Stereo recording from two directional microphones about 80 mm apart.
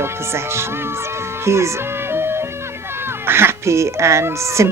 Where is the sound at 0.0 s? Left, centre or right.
Right.